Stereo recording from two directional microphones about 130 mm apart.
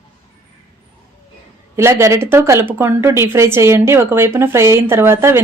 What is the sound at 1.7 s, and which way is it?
Speech, 20° right (ahead or behind).